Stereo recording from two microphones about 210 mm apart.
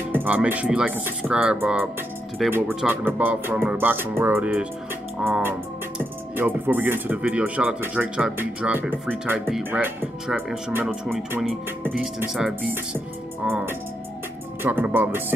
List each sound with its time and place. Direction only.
0.1 s speech: 10° right (ahead or behind)